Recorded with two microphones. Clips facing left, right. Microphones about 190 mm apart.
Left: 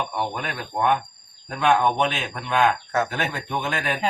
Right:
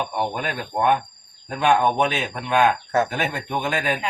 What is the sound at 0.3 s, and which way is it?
A man's voice, 10° right (ahead or behind).